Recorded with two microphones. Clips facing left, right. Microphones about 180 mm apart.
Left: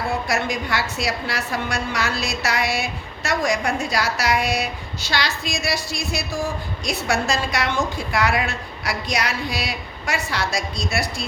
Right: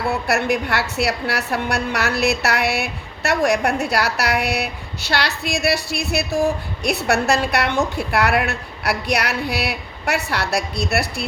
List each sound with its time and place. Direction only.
0.1 s a woman's voice: 65° right (ahead or behind)